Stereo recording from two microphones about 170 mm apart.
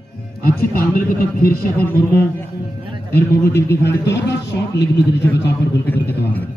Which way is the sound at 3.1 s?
70° left (ahead or behind).